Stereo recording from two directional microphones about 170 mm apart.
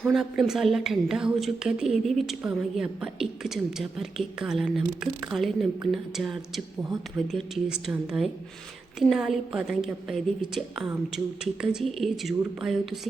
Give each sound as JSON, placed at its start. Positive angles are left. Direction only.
{"t": 0.0, "sound": "a woman's voice", "side_deg": 0}